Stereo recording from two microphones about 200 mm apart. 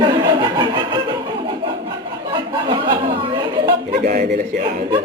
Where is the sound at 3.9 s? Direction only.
50° right (ahead or behind).